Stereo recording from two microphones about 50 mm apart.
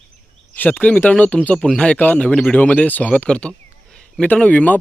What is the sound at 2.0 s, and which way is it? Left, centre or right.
Speech, left.